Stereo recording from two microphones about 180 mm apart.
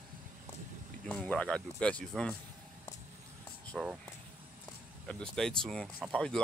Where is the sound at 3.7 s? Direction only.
5° right (ahead or behind).